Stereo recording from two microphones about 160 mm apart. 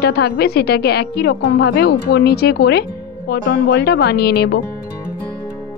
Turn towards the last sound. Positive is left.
turn(degrees=90)